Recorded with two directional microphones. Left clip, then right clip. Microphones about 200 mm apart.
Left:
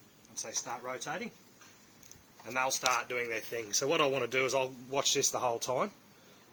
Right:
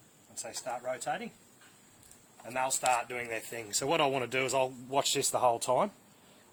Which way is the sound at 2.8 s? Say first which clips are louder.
Right 1 dB; 60° right (ahead or behind).